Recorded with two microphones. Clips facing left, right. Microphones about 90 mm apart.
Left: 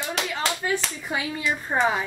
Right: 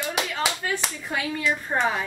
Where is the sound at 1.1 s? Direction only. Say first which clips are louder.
Right 1 dB; 10° left (ahead or behind).